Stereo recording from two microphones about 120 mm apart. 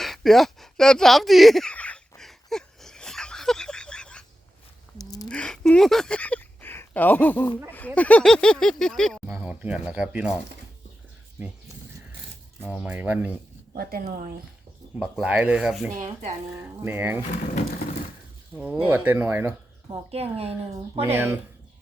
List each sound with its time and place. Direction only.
0.0 s a sound: centre (ahead or behind)
4.9 s a sound: 30° left (ahead or behind)
5.3 s speech: 5° left (ahead or behind)
9.3 s speech: 10° right (ahead or behind)
12.6 s speech: 10° right (ahead or behind)
14.9 s speech: 10° right (ahead or behind)
16.6 s speech: 20° right (ahead or behind)
17.3 s speech: 90° left
18.5 s speech: 10° right (ahead or behind)
20.1 s speech: 55° right (ahead or behind)
21.0 s speech: 20° right (ahead or behind)